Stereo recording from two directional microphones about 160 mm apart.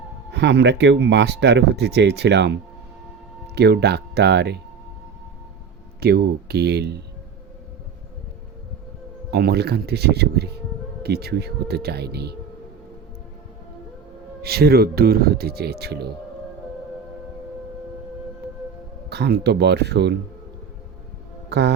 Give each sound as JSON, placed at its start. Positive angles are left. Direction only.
{"t": 0.3, "sound": "speech", "side_deg": -90}
{"t": 6.0, "sound": "speech", "side_deg": -75}
{"t": 9.3, "sound": "speech", "side_deg": -90}
{"t": 14.4, "sound": "speech", "side_deg": -75}
{"t": 19.1, "sound": "speech", "side_deg": -90}